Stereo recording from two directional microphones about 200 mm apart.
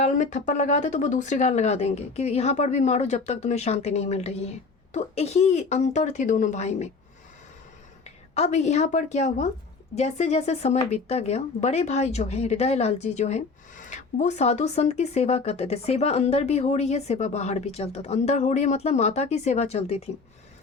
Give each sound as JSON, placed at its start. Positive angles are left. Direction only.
{"t": 0.0, "sound": "speech", "side_deg": 35}
{"t": 8.0, "sound": "speech", "side_deg": 35}